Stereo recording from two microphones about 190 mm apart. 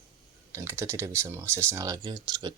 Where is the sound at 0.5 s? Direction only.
15° right (ahead or behind).